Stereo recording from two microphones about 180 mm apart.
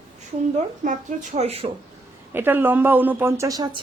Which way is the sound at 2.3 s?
10° right (ahead or behind).